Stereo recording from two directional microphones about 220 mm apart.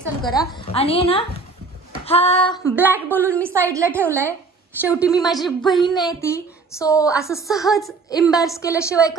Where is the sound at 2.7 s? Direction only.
10° right (ahead or behind).